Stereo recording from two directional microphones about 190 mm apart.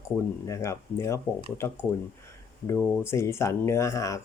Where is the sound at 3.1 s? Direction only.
15° left (ahead or behind).